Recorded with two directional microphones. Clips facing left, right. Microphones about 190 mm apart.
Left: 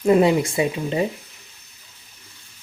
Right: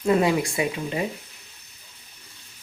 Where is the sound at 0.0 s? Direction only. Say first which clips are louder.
Left 4 dB; 25° left (ahead or behind).